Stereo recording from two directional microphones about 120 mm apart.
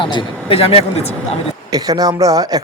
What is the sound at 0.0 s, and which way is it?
Speech, 45° left (ahead or behind).